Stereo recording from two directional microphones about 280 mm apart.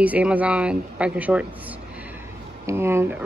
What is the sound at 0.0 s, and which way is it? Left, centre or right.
Speech, centre.